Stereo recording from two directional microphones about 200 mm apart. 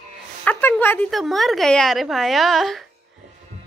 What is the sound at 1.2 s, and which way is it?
A woman's voice, centre (ahead or behind).